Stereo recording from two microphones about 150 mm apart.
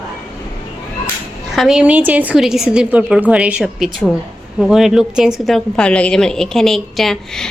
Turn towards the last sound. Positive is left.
turn(degrees=5)  # may be behind; listen again after turning